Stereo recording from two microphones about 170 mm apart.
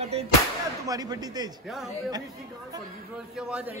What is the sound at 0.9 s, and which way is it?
Speech, 25° right (ahead or behind).